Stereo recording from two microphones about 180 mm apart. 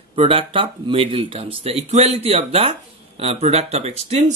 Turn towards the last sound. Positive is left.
turn(degrees=-40)  # may be behind; listen again after turning